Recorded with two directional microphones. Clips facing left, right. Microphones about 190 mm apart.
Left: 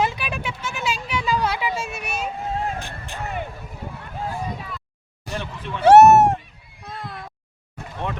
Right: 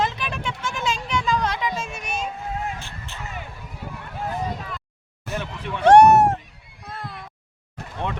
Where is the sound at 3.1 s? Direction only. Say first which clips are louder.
Left 6 dB; 55° left (ahead or behind).